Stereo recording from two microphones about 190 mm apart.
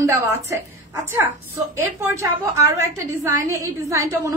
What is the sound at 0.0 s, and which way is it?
Speech, 15° right (ahead or behind).